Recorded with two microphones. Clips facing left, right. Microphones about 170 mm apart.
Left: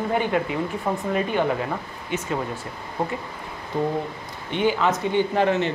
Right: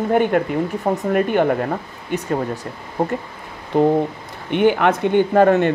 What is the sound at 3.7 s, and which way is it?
Speech, 70° right (ahead or behind).